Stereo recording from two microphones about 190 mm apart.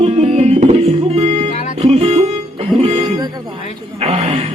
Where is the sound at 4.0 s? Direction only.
35° right (ahead or behind).